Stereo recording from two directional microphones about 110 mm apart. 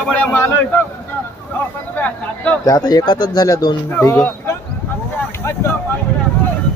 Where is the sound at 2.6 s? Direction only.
35° left (ahead or behind).